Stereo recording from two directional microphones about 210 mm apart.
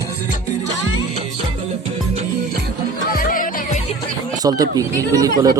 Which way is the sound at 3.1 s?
40° left (ahead or behind).